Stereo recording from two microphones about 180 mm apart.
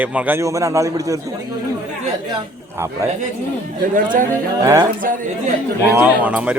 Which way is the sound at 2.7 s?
15° right (ahead or behind).